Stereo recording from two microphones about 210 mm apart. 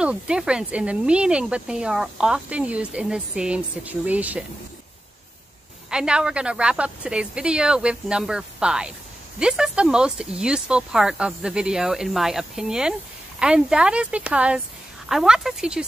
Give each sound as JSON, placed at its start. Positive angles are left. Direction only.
{"t": 0.0, "sound": "speech", "side_deg": -5}
{"t": 5.9, "sound": "speech", "side_deg": -5}